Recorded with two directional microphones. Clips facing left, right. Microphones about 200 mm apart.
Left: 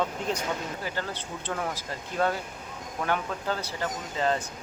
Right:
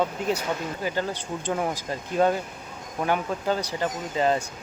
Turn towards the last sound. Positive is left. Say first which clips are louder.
# right 4 dB
turn(degrees=-15)  # may be behind; listen again after turning